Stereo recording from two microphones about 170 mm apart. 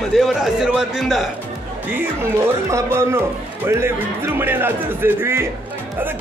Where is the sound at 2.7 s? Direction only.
15° right (ahead or behind).